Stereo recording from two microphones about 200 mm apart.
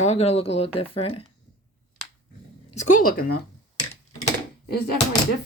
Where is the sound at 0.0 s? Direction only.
35° left (ahead or behind).